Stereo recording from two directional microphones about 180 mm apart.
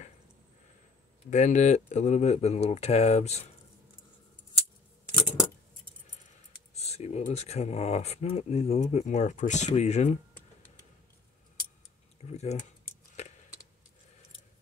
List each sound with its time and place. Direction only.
1.3 s speech: 40° left (ahead or behind)
6.7 s speech: 35° left (ahead or behind)
12.3 s speech: 35° left (ahead or behind)